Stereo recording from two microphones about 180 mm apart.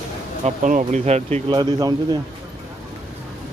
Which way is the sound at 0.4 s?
45° right (ahead or behind).